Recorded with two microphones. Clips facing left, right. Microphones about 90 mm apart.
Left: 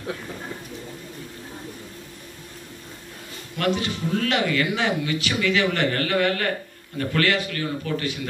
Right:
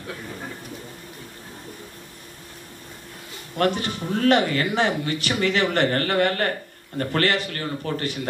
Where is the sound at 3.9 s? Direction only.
40° right (ahead or behind).